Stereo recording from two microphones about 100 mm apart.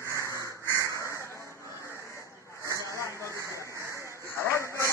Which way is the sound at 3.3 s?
30° right (ahead or behind).